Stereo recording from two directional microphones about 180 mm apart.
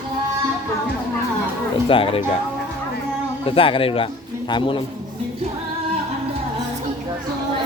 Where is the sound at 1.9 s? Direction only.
30° left (ahead or behind).